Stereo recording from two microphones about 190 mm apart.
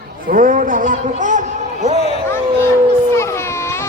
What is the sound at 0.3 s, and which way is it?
A man's voice, 45° right (ahead or behind).